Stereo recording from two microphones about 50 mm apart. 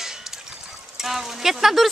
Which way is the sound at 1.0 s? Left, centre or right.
Centre.